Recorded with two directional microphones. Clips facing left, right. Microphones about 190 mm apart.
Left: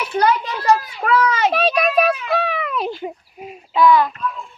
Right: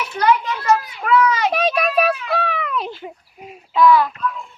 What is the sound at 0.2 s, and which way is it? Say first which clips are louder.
Children playing: even; 35° left (ahead or behind).